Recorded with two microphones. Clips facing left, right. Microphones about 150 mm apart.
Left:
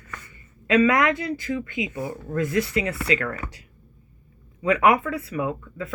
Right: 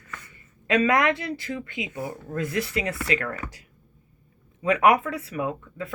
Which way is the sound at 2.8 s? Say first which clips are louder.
Left 2 dB; 30° left (ahead or behind).